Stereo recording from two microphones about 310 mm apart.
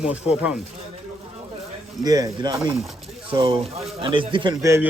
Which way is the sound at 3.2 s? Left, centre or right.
Centre.